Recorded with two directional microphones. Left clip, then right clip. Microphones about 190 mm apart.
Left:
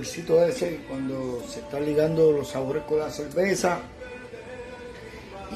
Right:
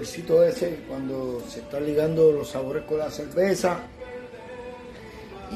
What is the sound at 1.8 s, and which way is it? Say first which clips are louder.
Speech: right 1 dB; 15° left (ahead or behind).